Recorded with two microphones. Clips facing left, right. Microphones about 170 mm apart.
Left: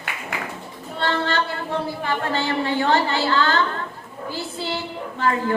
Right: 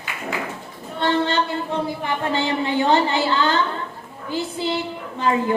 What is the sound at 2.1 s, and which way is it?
A woman's voice, 20° right (ahead or behind).